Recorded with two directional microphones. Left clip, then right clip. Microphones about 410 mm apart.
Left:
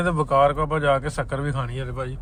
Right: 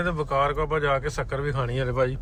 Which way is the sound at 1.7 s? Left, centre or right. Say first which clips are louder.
Right 7 dB; centre.